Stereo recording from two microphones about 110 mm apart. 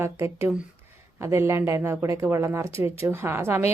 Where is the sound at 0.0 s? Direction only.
25° right (ahead or behind).